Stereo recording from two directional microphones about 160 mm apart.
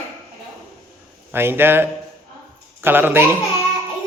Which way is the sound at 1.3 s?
15° right (ahead or behind).